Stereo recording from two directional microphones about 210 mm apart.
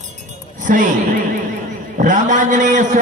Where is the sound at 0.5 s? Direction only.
40° right (ahead or behind).